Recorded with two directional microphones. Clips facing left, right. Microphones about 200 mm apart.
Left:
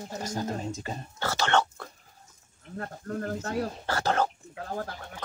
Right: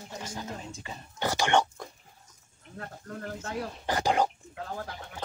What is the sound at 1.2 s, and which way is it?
Whispering, 15° right (ahead or behind).